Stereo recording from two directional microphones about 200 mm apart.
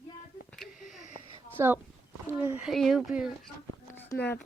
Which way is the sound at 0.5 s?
Centre (ahead or behind).